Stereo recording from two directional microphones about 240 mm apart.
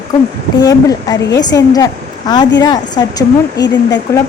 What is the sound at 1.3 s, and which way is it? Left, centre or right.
Speech, centre.